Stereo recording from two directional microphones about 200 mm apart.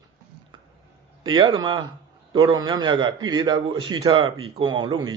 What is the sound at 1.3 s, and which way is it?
A man's voice, 20° right (ahead or behind).